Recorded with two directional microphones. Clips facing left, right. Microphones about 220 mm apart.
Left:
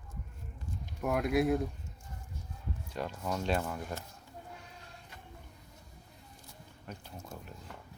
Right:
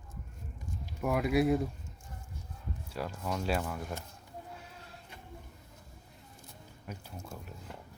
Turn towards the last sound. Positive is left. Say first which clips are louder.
# right 1 dB
turn(degrees=-5)  # may be behind; listen again after turning